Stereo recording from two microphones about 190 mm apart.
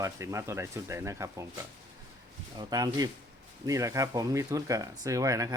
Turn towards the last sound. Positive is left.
turn(degrees=-20)  # may be behind; listen again after turning